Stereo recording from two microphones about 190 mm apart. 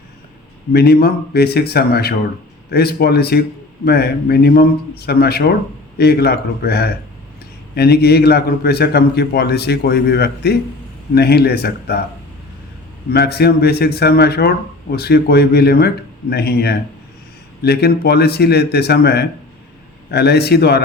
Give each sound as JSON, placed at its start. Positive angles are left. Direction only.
{"t": 0.7, "sound": "speech", "side_deg": 55}
{"t": 13.1, "sound": "speech", "side_deg": 55}